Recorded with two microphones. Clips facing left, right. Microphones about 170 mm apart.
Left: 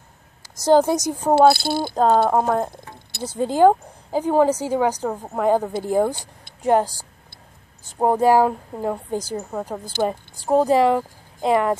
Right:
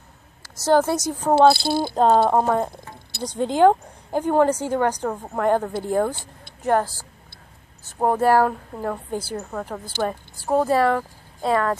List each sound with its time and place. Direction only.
0.4 s a woman's voice: 15° left (ahead or behind)
2.0 s a woman's voice: centre (ahead or behind); by 11.7 s 15° left (ahead or behind)